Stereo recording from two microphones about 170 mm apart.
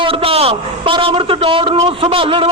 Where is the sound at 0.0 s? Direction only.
35° right (ahead or behind).